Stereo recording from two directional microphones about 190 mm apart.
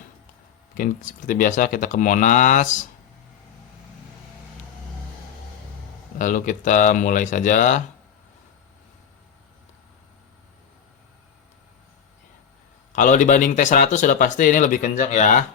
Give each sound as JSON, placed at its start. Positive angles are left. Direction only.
{"t": 0.8, "sound": "speech", "side_deg": 45}
{"t": 6.1, "sound": "speech", "side_deg": 40}
{"t": 12.9, "sound": "speech", "side_deg": 40}